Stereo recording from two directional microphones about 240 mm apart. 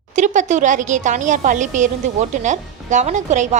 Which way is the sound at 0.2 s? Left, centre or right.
Right.